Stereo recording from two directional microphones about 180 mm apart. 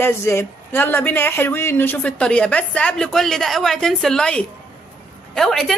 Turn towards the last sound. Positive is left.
turn(degrees=0)  # may be behind; listen again after turning